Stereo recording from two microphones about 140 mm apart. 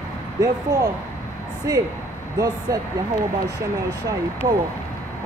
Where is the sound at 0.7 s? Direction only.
25° right (ahead or behind).